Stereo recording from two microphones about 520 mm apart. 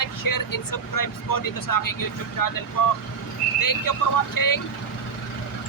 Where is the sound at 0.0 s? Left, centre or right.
Left.